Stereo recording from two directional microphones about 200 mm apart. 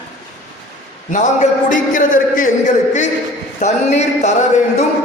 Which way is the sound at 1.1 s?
40° left (ahead or behind).